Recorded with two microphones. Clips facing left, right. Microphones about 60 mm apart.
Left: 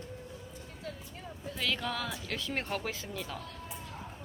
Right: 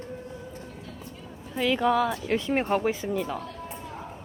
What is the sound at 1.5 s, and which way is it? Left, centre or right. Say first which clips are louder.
A woman's voice: right 11 dB; right.